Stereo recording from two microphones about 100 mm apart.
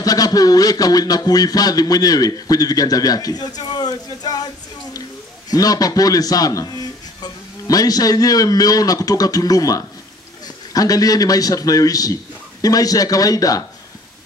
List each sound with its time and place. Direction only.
0.0 s speech: 40° left (ahead or behind)
5.5 s speech: 40° left (ahead or behind)